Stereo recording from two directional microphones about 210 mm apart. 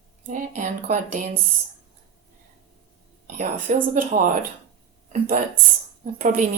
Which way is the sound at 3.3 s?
35° right (ahead or behind).